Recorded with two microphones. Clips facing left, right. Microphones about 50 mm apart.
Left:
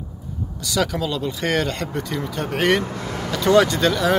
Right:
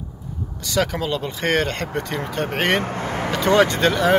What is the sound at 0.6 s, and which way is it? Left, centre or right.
Speech, right.